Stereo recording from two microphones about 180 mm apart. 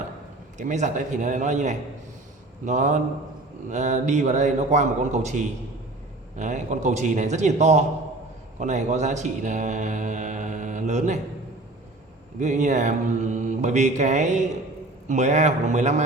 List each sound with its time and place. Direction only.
0.5 s a man's voice: 40° right (ahead or behind)
3.7 s mantra: 40° right (ahead or behind)
8.5 s speech: 40° right (ahead or behind)
12.4 s mantra: 40° right (ahead or behind)